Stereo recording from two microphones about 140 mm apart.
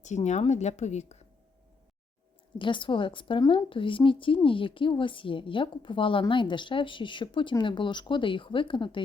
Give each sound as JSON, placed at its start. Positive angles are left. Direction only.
{"t": 0.0, "sound": "speech", "side_deg": 55}
{"t": 2.6, "sound": "a woman's voice", "side_deg": 35}